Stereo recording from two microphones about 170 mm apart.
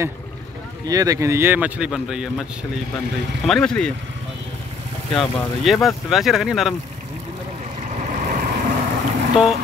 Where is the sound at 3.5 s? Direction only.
5° left (ahead or behind).